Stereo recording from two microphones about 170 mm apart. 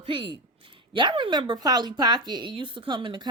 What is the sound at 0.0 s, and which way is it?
Speech, 30° right (ahead or behind).